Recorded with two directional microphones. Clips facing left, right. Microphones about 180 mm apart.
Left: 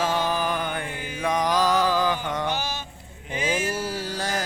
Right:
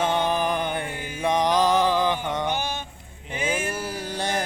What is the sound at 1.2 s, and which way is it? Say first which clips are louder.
Mantra: right 2 dB; 30° right (ahead or behind).